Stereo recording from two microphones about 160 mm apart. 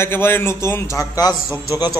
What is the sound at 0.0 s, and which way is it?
A man's voice, 15° left (ahead or behind).